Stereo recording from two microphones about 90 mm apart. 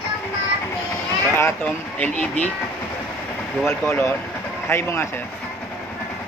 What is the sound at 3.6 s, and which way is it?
Speech, 30° left (ahead or behind).